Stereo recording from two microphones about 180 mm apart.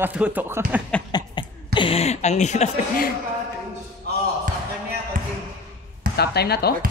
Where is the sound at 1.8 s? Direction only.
30° left (ahead or behind); by 3.1 s 45° left (ahead or behind).